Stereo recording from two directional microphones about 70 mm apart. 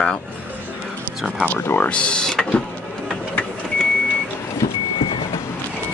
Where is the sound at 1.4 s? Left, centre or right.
Left; by 3.9 s centre.